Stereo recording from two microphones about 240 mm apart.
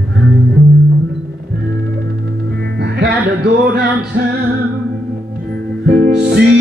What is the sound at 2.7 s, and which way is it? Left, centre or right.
Music, right.